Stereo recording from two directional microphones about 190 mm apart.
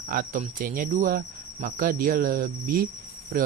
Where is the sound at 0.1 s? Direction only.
45° right (ahead or behind).